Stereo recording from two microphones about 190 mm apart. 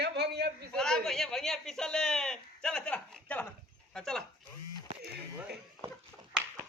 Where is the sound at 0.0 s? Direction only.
60° right (ahead or behind).